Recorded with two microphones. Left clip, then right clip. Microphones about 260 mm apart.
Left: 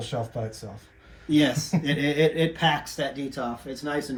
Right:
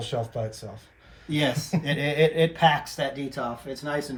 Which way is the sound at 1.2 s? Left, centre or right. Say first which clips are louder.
Left 3 dB; right.